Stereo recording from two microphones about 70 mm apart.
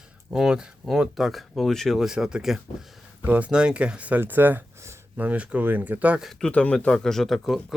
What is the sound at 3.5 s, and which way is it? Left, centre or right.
Speech, centre.